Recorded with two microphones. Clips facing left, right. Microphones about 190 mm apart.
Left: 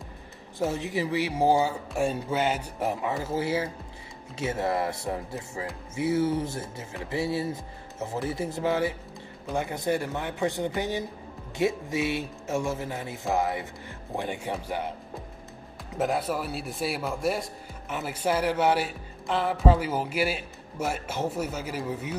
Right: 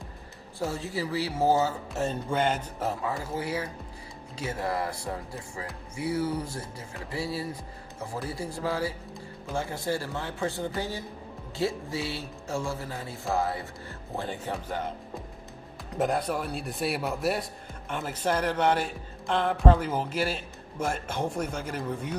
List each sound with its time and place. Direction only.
0.7 s speech: 20° left (ahead or behind)
15.9 s a man's voice: 5° left (ahead or behind)